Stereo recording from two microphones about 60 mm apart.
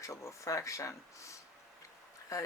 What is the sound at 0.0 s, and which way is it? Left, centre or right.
Speech, left.